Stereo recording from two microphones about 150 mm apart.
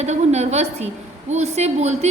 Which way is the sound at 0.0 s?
50° right (ahead or behind).